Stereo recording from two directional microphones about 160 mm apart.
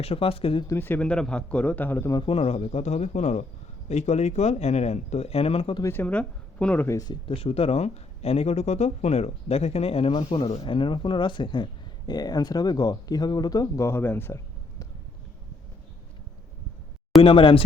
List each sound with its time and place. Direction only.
0.0 s speech: 35° left (ahead or behind)
0.7 s a man's voice: 10° left (ahead or behind)
2.1 s speech: 35° left (ahead or behind)
5.8 s a man's voice: 10° left (ahead or behind)
7.1 s speech: 35° left (ahead or behind); by 14.8 s 15° left (ahead or behind)
17.2 s speech: 30° left (ahead or behind)